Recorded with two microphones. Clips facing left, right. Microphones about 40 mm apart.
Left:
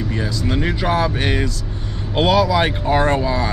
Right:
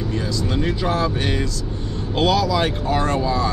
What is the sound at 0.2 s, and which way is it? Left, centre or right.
Speech, left.